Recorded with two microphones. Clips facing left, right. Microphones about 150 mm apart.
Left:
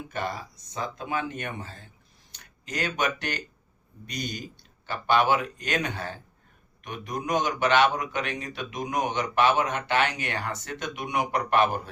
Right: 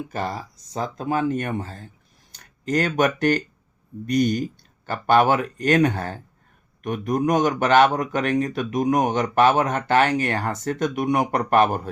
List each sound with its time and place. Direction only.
0.1 s speech: 35° right (ahead or behind)